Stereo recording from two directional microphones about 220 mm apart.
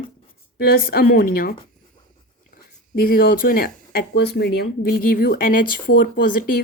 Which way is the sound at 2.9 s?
40° left (ahead or behind).